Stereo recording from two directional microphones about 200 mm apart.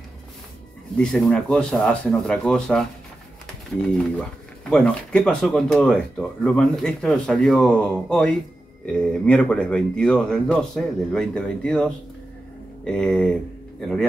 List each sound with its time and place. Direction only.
0.9 s speech: centre (ahead or behind)
4.0 s speech: 5° left (ahead or behind)